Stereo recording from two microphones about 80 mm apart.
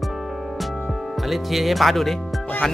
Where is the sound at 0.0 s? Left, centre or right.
Centre.